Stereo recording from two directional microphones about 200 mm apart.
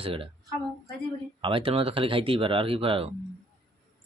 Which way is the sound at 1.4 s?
25° right (ahead or behind).